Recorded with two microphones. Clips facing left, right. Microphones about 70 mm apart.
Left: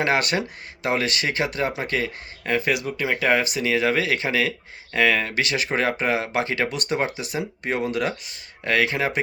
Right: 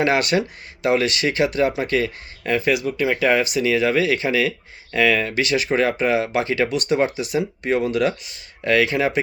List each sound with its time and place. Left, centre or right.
0.0 s speech: left